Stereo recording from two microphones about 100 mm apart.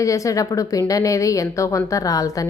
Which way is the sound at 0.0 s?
35° left (ahead or behind).